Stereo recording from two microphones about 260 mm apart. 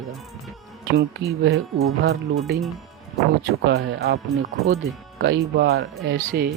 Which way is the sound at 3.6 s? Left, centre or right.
Right.